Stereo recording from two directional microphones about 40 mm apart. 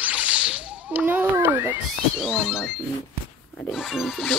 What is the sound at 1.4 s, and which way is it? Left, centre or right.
Cat, right.